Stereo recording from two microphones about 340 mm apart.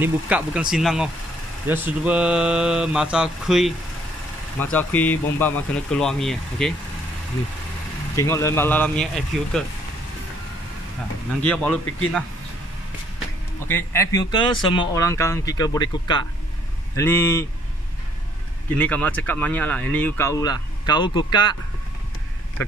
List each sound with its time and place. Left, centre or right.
0.0 s speech: centre
8.2 s speech: centre
11.4 s speech: centre
13.7 s speech: centre
18.8 s speech: centre